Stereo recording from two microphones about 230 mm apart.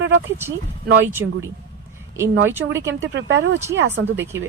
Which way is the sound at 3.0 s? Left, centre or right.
Right.